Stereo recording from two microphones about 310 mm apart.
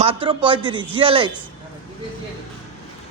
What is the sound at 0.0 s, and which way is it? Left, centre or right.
Speech, centre.